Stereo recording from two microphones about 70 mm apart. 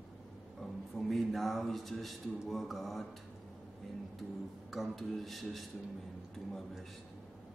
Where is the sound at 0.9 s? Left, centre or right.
Centre.